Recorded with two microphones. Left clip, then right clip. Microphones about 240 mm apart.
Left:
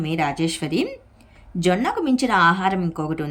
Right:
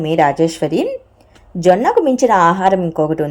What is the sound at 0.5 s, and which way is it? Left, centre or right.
Speech, left.